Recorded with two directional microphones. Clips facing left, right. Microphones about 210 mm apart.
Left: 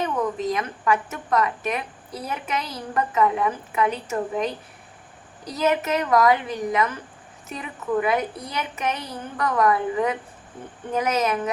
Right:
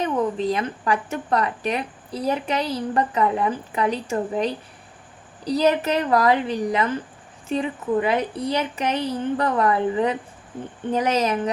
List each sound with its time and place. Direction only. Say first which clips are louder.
0.0 s a woman's voice: right 2 dB; 30° right (ahead or behind)